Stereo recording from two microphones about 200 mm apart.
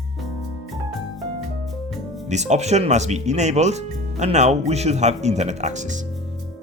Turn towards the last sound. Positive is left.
turn(degrees=-35)  # may be behind; listen again after turning